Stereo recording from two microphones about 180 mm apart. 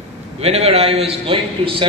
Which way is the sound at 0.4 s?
35° right (ahead or behind).